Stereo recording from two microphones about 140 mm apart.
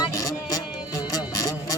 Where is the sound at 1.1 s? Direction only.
25° left (ahead or behind).